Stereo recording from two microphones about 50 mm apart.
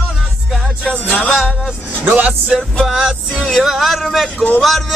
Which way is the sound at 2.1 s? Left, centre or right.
Right.